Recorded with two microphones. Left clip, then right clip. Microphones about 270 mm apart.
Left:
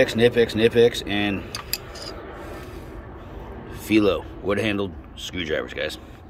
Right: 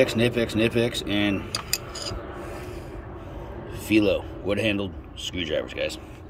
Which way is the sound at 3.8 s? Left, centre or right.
Centre.